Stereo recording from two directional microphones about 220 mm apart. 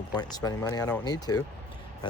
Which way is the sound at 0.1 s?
20° left (ahead or behind).